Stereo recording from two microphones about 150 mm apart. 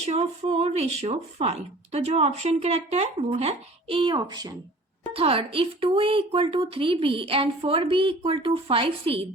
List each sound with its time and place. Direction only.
0.0 s speech: 45° right (ahead or behind); by 4.5 s 30° right (ahead or behind)
5.1 s speech: 40° right (ahead or behind)